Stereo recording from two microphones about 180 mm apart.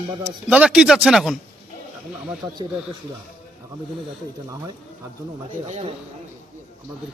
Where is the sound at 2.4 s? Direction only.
20° right (ahead or behind).